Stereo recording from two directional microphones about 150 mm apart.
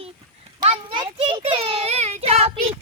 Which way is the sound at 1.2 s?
35° right (ahead or behind).